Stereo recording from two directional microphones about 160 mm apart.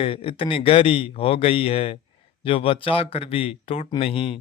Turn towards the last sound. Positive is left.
turn(degrees=35)  # may be behind; listen again after turning